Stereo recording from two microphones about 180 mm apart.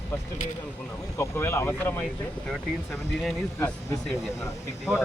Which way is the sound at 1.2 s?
15° left (ahead or behind).